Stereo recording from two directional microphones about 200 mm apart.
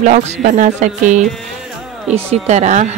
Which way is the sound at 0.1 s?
40° right (ahead or behind).